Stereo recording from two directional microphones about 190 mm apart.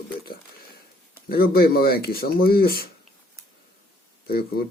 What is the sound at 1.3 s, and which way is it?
Speech, 50° left (ahead or behind).